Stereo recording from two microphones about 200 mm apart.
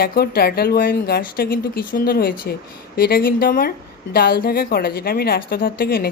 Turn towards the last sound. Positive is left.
turn(degrees=50)  # may be behind; listen again after turning